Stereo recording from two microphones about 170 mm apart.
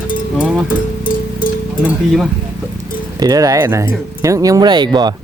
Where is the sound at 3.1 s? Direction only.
20° right (ahead or behind).